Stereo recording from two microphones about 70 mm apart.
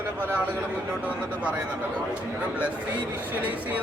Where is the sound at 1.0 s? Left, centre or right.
Centre.